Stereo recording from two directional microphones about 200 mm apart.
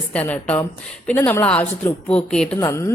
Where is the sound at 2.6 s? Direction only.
15° left (ahead or behind).